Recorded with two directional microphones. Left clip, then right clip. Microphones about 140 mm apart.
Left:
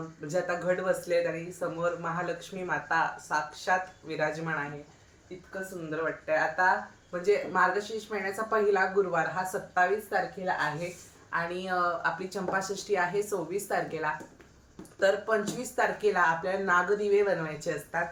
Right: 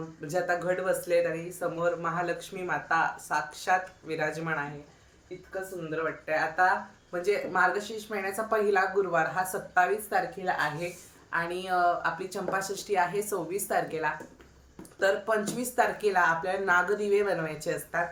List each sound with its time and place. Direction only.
0.3 s speech: 15° right (ahead or behind)
6.2 s speech: 20° right (ahead or behind)